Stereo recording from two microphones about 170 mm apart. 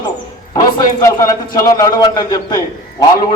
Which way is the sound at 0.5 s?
25° left (ahead or behind).